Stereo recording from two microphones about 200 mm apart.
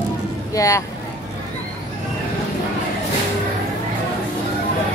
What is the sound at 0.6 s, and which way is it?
Speech, 15° left (ahead or behind).